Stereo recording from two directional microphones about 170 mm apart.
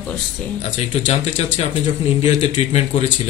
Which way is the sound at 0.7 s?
45° left (ahead or behind).